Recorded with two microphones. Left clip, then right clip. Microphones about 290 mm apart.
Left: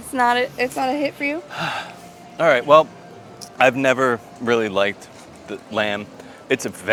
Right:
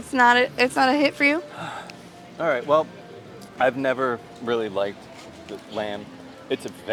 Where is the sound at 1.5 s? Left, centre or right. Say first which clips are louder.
Left 8 dB; left.